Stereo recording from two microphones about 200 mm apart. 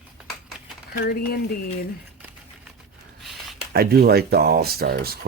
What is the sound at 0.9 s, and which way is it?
Speech, 55° left (ahead or behind).